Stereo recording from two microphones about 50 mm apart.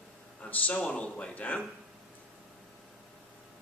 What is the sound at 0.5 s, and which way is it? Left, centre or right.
Speech, left.